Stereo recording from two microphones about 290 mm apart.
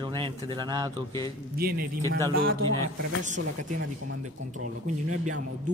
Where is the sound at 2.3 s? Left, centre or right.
Right.